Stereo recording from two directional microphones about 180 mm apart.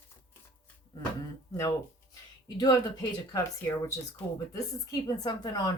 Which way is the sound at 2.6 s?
20° left (ahead or behind).